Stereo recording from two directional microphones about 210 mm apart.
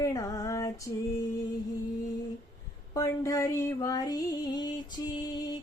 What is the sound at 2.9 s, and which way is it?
Female singing, 15° left (ahead or behind).